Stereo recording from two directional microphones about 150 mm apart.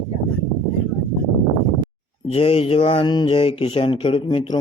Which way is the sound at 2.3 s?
40° left (ahead or behind).